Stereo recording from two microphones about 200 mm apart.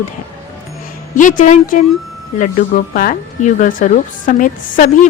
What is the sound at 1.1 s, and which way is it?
Speech, 40° left (ahead or behind).